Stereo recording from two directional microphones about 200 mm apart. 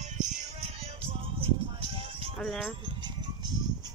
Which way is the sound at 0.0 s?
35° right (ahead or behind).